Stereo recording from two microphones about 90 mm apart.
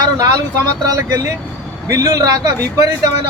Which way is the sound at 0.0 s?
45° right (ahead or behind).